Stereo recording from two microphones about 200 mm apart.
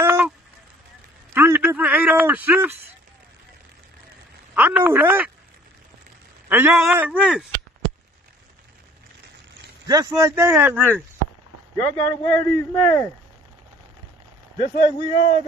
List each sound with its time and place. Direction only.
0.0 s a sound: 10° right (ahead or behind)
1.3 s a sound: 10° right (ahead or behind)
4.6 s speech: 10° right (ahead or behind)
6.5 s speech: 10° right (ahead or behind)
9.8 s speech: 15° right (ahead or behind)
11.7 s a man's voice: 10° left (ahead or behind)
14.6 s a man's voice: 35° left (ahead or behind)